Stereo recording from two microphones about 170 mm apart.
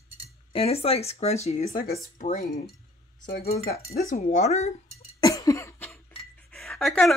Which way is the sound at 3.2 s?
60° left (ahead or behind).